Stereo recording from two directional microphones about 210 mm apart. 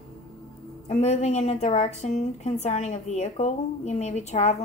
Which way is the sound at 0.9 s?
30° left (ahead or behind).